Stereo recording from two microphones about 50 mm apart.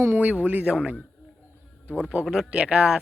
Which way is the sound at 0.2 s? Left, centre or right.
Right.